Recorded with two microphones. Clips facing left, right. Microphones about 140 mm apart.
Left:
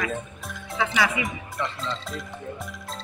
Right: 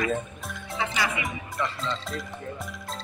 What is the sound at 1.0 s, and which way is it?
Speech, centre (ahead or behind).